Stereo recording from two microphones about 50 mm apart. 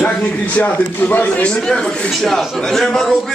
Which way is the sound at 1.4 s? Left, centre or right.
Centre.